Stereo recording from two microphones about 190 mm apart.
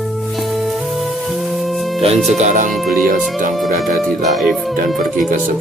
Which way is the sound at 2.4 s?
40° right (ahead or behind).